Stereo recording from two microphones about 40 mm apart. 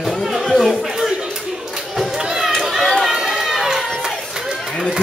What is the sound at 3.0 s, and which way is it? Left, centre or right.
Run, centre.